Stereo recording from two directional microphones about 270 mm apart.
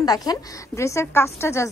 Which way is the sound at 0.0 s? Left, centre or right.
Centre.